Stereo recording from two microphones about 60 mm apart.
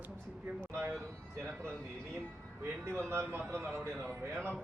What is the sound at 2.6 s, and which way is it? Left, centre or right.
A man's voice, right.